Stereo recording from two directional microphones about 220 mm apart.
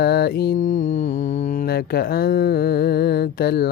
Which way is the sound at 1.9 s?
45° left (ahead or behind).